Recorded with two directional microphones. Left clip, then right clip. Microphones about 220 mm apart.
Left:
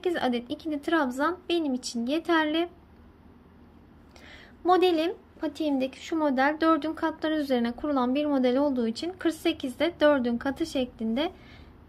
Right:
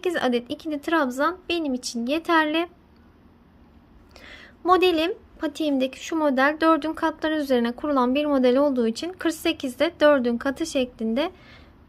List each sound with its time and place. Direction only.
0.0 s a woman's voice: 20° right (ahead or behind)
4.2 s a woman's voice: 20° right (ahead or behind)